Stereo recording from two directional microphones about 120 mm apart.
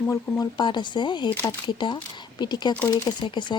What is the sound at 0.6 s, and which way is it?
Speech, 40° left (ahead or behind).